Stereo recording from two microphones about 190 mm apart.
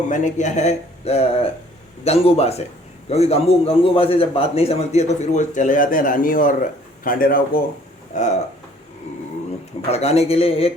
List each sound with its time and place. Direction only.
0.1 s a man's voice: 40° left (ahead or behind)
9.9 s a man's voice: 35° left (ahead or behind)